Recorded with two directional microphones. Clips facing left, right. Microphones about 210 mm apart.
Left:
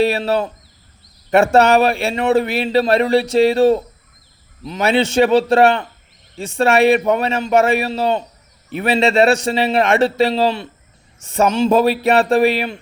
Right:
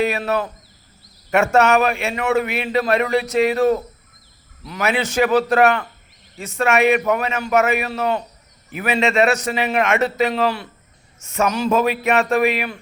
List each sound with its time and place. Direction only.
0.0 s speech: 30° left (ahead or behind)